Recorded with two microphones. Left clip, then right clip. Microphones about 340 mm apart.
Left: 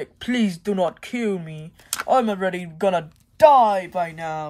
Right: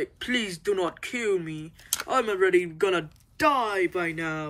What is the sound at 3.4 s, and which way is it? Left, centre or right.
Speech, centre.